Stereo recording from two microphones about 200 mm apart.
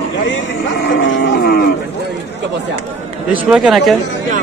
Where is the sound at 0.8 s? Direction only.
65° left (ahead or behind).